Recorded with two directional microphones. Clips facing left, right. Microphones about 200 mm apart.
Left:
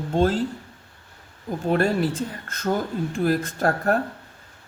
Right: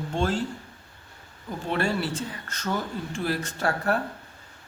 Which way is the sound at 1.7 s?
45° left (ahead or behind).